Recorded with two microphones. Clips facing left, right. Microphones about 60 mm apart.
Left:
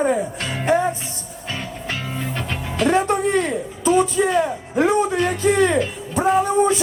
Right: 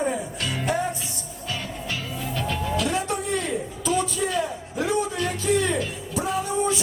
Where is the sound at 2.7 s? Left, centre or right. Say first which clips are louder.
Left 10 dB; left.